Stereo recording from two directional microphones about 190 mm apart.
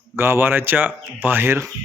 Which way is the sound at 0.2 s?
10° right (ahead or behind).